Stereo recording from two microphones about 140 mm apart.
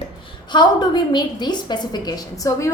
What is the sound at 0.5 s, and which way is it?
A woman's voice, 30° left (ahead or behind).